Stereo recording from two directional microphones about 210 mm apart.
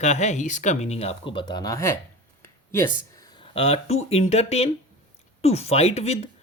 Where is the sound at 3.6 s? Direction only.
30° left (ahead or behind).